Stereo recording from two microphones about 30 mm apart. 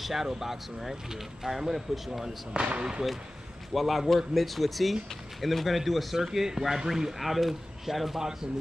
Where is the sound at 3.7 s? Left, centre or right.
Centre.